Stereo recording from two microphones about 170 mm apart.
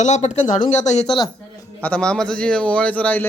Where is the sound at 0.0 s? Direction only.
45° left (ahead or behind).